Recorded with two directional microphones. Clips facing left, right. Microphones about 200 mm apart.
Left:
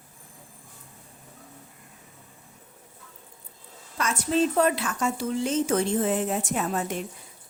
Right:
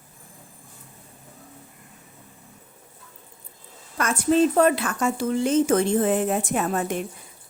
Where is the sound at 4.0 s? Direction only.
55° right (ahead or behind).